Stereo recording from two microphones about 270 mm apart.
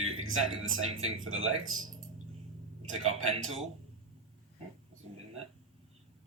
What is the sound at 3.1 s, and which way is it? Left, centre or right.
Speech, right.